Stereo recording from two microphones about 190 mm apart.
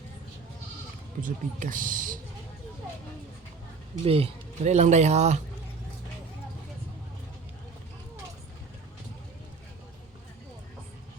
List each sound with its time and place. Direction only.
1.2 s speech: 45° right (ahead or behind)
4.0 s speech: 30° right (ahead or behind)